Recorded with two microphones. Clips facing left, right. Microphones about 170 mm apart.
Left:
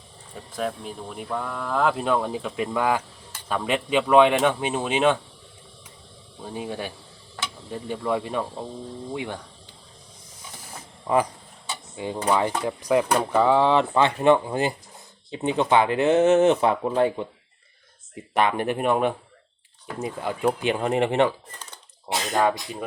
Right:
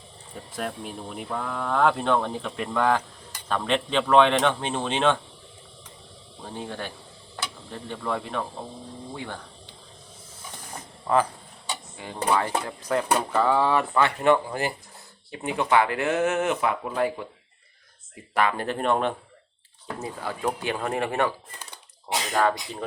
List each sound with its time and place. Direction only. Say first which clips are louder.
0.5 s speech: left 3 dB; centre (ahead or behind)
6.5 s speech: left 3 dB; 10° left (ahead or behind)
10.5 s a sound: right 2 dB; 10° left (ahead or behind)
11.9 s speech: left 2 dB; 20° left (ahead or behind)